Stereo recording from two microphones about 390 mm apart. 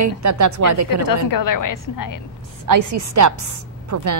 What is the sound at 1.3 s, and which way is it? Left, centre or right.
Speech, left.